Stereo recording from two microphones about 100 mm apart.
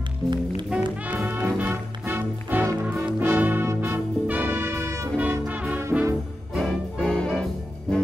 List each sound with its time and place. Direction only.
0.2 s music: 10° left (ahead or behind)
1.0 s music: 15° right (ahead or behind)
5.4 s music: 15° right (ahead or behind)
5.8 s brass instrument: 25° right (ahead or behind)
6.5 s music: 5° left (ahead or behind)